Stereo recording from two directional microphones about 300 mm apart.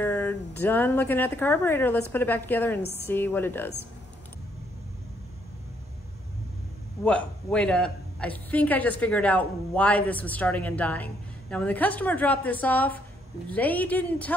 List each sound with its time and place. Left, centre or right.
0.0 s speech: centre
7.1 s a woman's voice: centre